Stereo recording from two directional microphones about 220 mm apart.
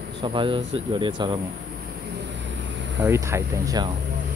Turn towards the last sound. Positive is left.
turn(degrees=-15)  # may be behind; listen again after turning